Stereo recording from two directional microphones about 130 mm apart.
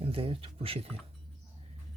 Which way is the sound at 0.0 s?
45° right (ahead or behind).